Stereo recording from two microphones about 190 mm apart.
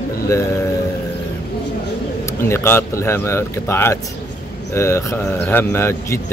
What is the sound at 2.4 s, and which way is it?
Speech, 15° left (ahead or behind).